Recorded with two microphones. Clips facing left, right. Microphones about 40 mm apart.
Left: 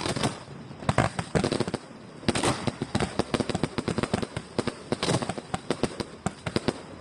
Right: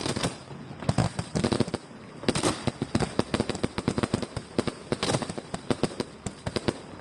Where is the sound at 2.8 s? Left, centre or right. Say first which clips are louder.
Right 1 dB; left.